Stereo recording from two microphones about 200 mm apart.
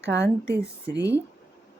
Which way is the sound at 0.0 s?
60° right (ahead or behind).